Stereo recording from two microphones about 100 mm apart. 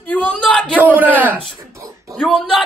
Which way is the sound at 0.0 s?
15° left (ahead or behind).